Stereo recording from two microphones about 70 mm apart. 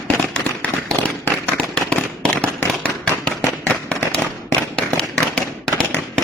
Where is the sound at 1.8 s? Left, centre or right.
Centre.